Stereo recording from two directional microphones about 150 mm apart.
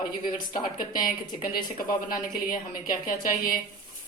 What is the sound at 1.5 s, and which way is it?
Speech, 75° left (ahead or behind).